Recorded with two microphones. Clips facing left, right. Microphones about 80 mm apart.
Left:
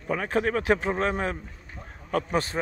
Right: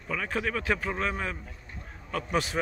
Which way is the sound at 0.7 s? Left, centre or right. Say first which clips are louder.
Left 5 dB; left.